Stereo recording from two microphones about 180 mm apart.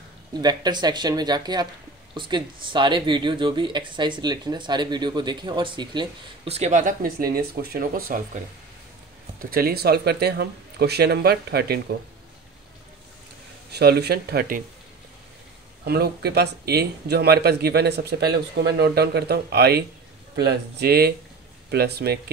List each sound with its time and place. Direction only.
0.3 s speech: 25° right (ahead or behind); by 8.2 s 50° right (ahead or behind)
9.5 s speech: 55° right (ahead or behind)
13.7 s speech: 65° right (ahead or behind)
15.8 s speech: 60° right (ahead or behind)